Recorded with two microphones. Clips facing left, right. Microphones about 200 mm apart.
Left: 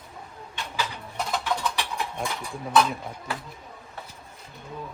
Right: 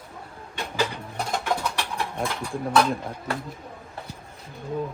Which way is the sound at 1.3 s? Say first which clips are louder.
Right 1 dB; 50° right (ahead or behind).